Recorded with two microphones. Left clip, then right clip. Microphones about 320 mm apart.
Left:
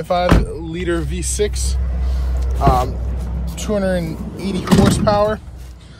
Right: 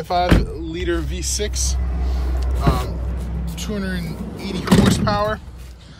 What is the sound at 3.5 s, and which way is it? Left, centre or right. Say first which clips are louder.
Speech: left 9 dB; centre.